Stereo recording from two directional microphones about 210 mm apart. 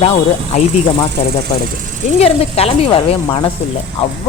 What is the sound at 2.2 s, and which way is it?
A woman's voice, 30° left (ahead or behind).